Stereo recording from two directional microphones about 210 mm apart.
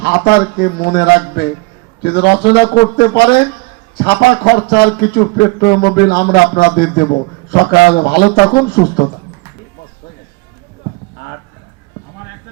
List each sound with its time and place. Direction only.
0.0 s a man's voice: 50° left (ahead or behind)